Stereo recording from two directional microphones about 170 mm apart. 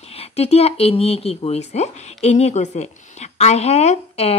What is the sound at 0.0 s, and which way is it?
A woman's voice, 35° left (ahead or behind).